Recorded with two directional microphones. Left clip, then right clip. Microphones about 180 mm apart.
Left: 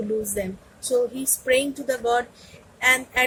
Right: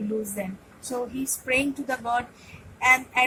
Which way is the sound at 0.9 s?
30° left (ahead or behind).